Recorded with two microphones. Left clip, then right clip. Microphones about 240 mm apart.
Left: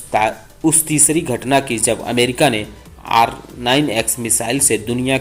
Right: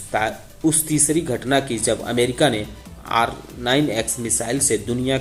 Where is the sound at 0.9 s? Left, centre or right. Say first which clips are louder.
Left 3 dB; centre.